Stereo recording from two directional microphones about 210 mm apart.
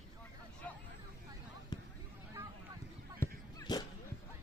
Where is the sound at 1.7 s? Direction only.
20° left (ahead or behind).